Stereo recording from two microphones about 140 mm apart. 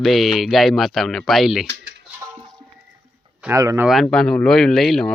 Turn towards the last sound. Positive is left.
turn(degrees=0)  # may be behind; listen again after turning